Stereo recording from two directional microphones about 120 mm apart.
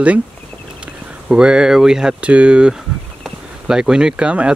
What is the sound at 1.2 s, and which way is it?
Speech, 5° right (ahead or behind).